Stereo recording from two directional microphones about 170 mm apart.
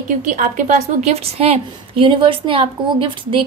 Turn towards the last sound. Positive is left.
turn(degrees=-30)  # may be behind; listen again after turning